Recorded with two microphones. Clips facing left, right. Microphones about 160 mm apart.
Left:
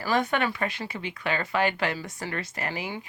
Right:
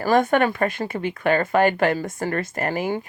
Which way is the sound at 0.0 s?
50° right (ahead or behind).